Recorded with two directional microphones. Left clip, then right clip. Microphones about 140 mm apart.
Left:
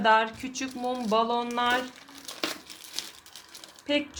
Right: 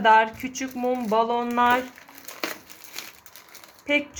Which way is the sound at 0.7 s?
25° right (ahead or behind).